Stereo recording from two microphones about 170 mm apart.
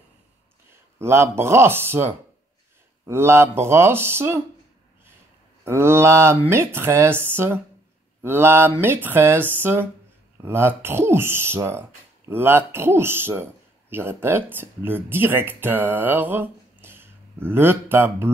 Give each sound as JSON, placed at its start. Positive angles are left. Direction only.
{"t": 0.9, "sound": "a man's voice", "side_deg": -15}
{"t": 5.7, "sound": "a man's voice", "side_deg": -15}